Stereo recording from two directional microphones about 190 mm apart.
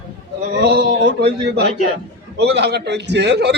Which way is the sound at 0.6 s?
60° right (ahead or behind).